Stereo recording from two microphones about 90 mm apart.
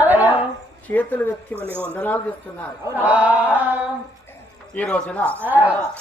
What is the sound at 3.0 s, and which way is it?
Mantra, 15° right (ahead or behind).